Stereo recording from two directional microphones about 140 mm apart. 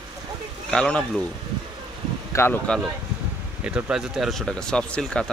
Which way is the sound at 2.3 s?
20° left (ahead or behind).